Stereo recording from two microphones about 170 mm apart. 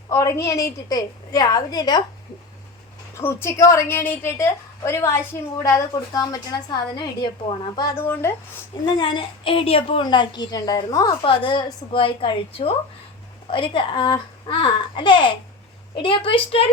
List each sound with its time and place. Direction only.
0.1 s a woman's voice: 20° left (ahead or behind)
3.2 s a woman's voice: 15° left (ahead or behind)
9.0 s a woman's voice: 30° left (ahead or behind)